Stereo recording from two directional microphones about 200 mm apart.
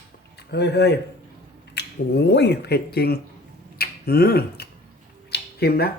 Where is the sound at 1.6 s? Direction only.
60° left (ahead or behind).